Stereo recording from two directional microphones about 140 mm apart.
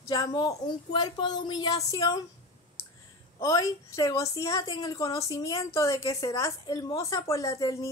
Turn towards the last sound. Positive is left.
turn(degrees=25)  # may be behind; listen again after turning